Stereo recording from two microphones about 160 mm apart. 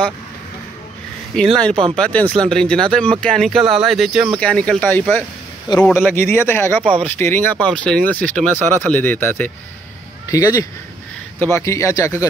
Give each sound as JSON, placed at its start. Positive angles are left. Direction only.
{"t": 1.3, "sound": "speech", "side_deg": 5}